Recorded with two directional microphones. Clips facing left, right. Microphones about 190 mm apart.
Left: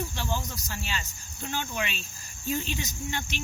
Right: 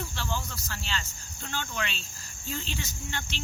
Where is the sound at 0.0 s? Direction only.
15° left (ahead or behind).